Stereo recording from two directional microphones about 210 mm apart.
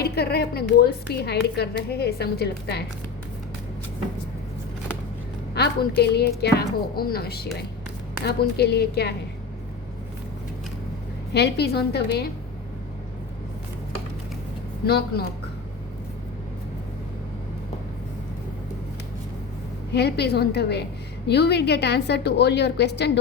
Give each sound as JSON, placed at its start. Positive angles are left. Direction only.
{"t": 0.0, "sound": "a woman's voice", "side_deg": 50}
{"t": 6.0, "sound": "a woman's voice", "side_deg": 50}
{"t": 11.3, "sound": "a woman's voice", "side_deg": 50}
{"t": 14.8, "sound": "a woman's voice", "side_deg": 50}
{"t": 19.9, "sound": "a woman's voice", "side_deg": 50}